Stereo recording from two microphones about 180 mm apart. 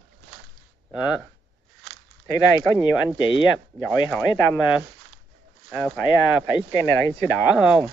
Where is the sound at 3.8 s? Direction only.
10° left (ahead or behind).